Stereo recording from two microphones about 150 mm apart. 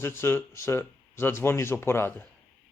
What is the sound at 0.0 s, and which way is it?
Speech, 15° left (ahead or behind).